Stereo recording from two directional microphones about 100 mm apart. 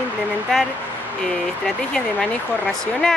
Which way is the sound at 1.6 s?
5° left (ahead or behind).